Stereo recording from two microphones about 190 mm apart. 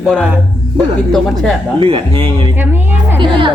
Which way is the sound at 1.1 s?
Centre (ahead or behind).